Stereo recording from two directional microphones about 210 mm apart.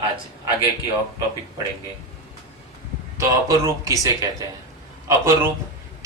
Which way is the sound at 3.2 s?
15° right (ahead or behind).